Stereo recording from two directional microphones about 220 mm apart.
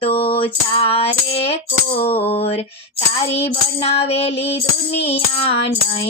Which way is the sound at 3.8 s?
25° left (ahead or behind).